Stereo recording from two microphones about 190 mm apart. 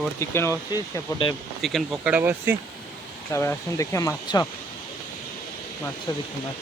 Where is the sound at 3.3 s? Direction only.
15° left (ahead or behind).